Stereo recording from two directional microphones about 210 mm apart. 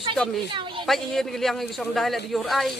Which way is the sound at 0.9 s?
Centre (ahead or behind).